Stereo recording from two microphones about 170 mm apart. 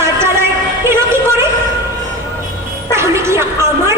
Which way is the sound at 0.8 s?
15° right (ahead or behind).